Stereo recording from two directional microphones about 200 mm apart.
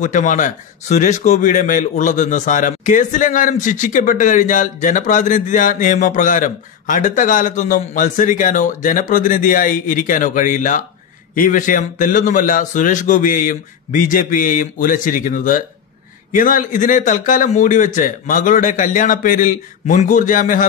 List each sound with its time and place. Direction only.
0.0 s a man's voice: 40° left (ahead or behind)